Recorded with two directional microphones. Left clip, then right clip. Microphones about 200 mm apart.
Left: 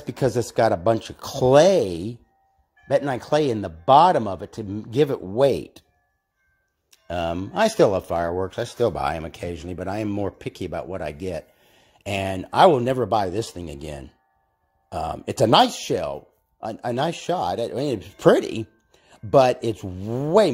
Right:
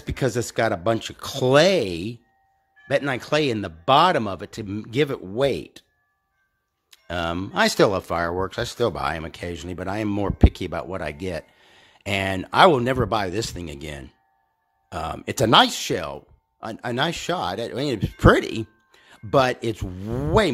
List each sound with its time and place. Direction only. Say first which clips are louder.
0.0 s speech: left 2 dB; 5° right (ahead or behind)
6.9 s speech: left 1 dB; 10° right (ahead or behind)